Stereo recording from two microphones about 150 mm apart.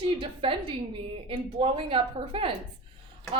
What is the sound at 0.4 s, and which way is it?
A woman's voice, 35° right (ahead or behind).